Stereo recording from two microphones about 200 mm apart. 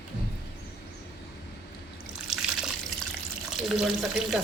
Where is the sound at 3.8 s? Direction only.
Centre (ahead or behind).